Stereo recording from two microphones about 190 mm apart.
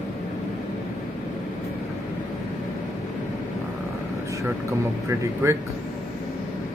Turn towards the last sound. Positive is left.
turn(degrees=-15)  # may be behind; listen again after turning